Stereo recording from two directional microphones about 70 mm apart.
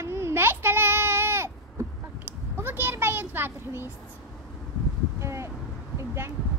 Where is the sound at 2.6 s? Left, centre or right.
Right.